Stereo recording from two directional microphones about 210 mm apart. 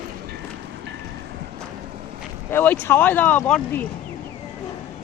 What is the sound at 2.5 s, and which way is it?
Speech, 10° left (ahead or behind).